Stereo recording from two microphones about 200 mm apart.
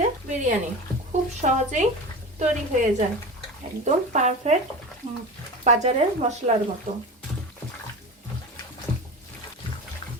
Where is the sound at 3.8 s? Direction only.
35° right (ahead or behind).